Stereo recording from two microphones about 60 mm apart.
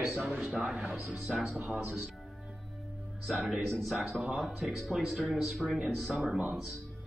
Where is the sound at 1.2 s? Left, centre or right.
Centre.